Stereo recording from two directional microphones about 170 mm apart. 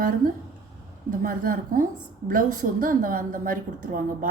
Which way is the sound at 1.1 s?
55° right (ahead or behind).